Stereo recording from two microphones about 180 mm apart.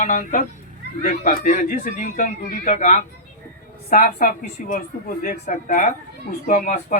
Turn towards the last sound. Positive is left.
turn(degrees=45)  # may be behind; listen again after turning